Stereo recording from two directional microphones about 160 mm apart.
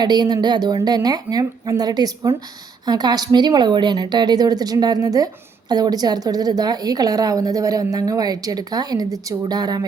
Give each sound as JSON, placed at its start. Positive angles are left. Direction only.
{"t": 0.0, "sound": "a woman's voice", "side_deg": -25}